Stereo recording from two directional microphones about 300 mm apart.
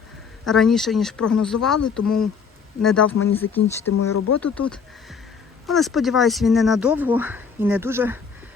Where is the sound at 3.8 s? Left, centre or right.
Left.